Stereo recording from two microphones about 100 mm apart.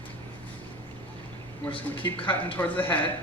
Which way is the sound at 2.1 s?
60° left (ahead or behind).